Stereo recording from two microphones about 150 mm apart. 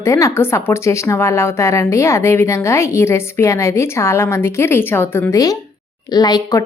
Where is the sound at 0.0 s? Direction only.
20° left (ahead or behind).